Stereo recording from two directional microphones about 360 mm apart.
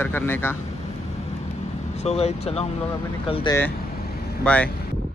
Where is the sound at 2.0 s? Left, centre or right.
Centre.